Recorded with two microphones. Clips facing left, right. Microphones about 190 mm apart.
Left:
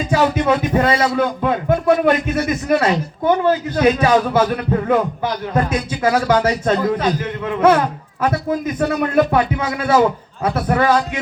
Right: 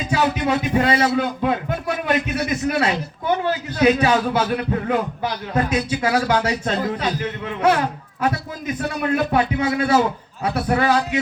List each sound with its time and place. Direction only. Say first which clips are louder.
0.1 s a man's voice: left 4 dB; 50° left (ahead or behind)
9.1 s a man's voice: left 2 dB; 50° left (ahead or behind)